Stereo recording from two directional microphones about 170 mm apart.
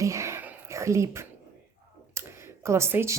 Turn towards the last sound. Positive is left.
turn(degrees=-15)  # may be behind; listen again after turning